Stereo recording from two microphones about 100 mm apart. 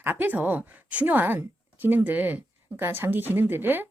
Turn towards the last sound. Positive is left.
turn(degrees=-20)  # may be behind; listen again after turning